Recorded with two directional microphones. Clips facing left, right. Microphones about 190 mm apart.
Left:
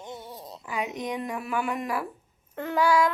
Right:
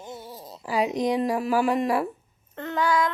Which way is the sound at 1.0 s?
35° right (ahead or behind).